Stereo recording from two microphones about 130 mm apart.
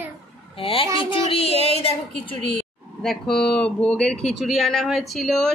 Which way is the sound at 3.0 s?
5° left (ahead or behind).